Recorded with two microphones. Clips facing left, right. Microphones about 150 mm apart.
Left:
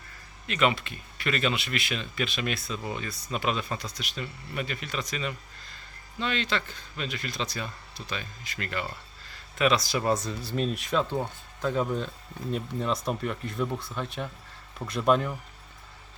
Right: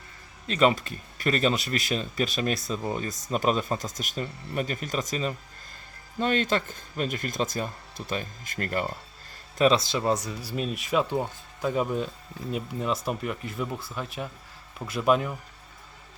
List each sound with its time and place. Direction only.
0.4 s speech: 35° right (ahead or behind); by 15.4 s 5° right (ahead or behind)